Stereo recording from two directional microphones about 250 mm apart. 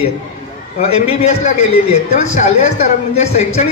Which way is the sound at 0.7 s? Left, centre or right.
Left.